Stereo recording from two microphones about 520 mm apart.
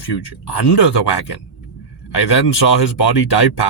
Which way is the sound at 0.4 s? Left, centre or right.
Left.